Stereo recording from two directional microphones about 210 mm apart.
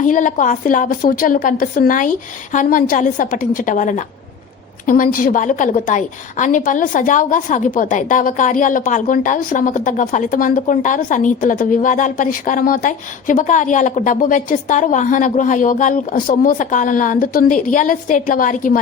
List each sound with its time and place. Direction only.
0.0 s a woman's voice: 40° left (ahead or behind)